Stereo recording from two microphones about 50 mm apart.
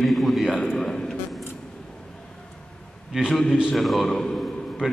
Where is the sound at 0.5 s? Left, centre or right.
Left.